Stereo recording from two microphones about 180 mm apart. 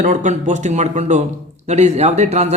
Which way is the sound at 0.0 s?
45° right (ahead or behind).